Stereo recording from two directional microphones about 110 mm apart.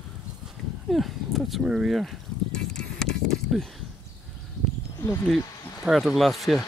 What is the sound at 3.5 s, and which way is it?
Speech, centre (ahead or behind).